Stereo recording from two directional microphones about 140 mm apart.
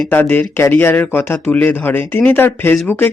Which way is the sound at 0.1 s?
15° left (ahead or behind).